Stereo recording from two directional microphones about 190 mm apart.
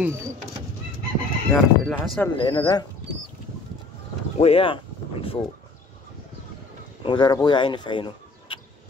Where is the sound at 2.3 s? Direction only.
25° left (ahead or behind).